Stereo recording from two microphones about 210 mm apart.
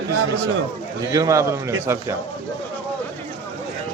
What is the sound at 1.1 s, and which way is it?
Speech, 15° right (ahead or behind).